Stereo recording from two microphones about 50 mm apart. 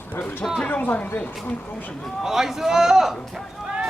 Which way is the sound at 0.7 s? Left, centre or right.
Left.